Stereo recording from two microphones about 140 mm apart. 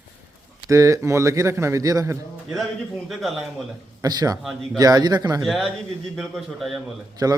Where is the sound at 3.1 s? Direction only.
Centre (ahead or behind).